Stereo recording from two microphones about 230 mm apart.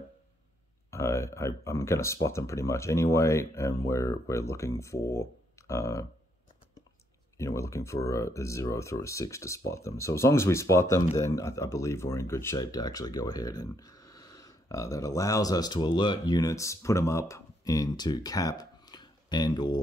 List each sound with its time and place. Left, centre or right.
0.8 s speech: centre
7.3 s speech: centre